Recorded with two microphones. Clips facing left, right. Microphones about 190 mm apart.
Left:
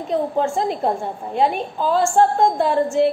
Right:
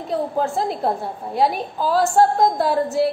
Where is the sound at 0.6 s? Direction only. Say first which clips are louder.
Left 1 dB; 5° right (ahead or behind).